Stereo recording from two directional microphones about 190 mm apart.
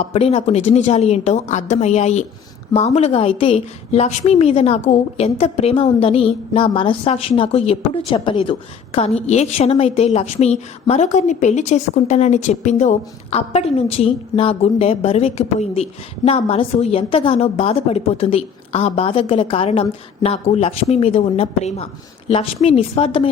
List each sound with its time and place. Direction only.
0.1 s a woman's voice: 30° left (ahead or behind)